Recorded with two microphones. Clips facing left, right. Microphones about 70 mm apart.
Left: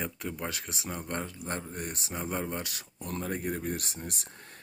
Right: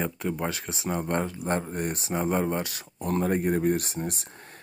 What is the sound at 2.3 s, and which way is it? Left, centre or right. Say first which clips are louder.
Speech: right 5 dB; right.